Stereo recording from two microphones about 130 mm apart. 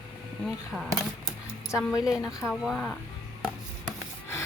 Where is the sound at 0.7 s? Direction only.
10° right (ahead or behind).